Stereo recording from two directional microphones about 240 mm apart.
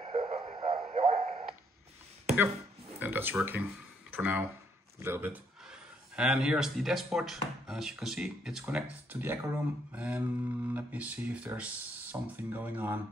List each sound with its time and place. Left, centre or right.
0.0 s radio: centre
3.0 s a sound: centre
4.2 s speech: centre